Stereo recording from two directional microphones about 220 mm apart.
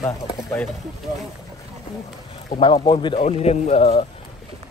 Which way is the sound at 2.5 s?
20° left (ahead or behind).